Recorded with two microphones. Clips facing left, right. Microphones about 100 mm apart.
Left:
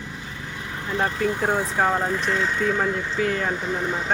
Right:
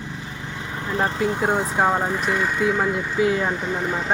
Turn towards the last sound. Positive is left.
turn(degrees=0)  # may be behind; listen again after turning